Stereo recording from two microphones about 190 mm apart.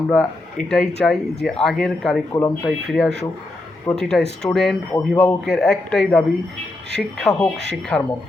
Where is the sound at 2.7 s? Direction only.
Centre (ahead or behind).